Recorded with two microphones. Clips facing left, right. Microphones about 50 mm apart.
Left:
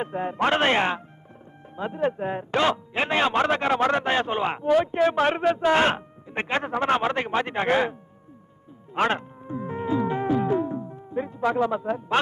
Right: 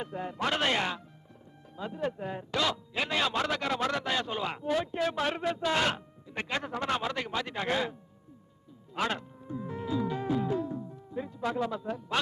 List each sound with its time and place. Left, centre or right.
0.0 s speech: left
9.0 s music: left